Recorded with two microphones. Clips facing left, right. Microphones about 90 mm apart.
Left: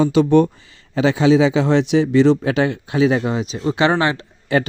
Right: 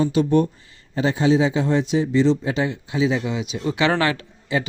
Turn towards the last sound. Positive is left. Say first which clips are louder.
# left 5 dB
turn(degrees=60)  # may be behind; listen again after turning